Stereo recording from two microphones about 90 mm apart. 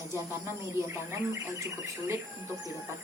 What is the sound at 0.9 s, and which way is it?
Speech, 35° right (ahead or behind).